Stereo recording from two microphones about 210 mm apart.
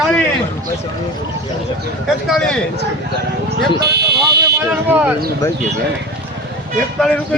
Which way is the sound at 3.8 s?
50° right (ahead or behind).